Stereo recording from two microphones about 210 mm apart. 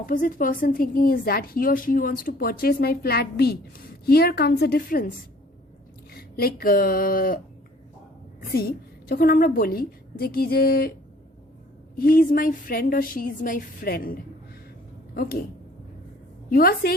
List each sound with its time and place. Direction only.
0.0 s a woman's voice: 40° left (ahead or behind)
8.4 s a woman's voice: 45° left (ahead or behind)
11.9 s a woman's voice: 45° left (ahead or behind)
16.5 s a woman's voice: 45° left (ahead or behind)